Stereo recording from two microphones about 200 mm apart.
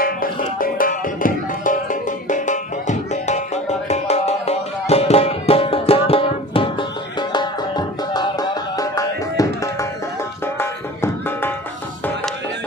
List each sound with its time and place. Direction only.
0.0 s music: 45° left (ahead or behind); by 11.5 s 10° left (ahead or behind)